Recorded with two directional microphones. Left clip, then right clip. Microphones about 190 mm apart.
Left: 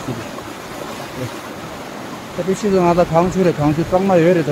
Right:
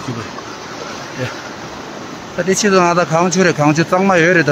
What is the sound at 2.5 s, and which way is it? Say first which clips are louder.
Speech: right 3 dB; 5° left (ahead or behind).